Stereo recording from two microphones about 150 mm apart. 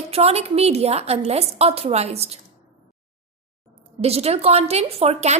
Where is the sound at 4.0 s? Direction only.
45° right (ahead or behind).